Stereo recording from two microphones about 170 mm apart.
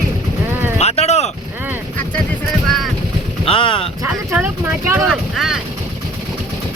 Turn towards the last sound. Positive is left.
turn(degrees=-5)  # may be behind; listen again after turning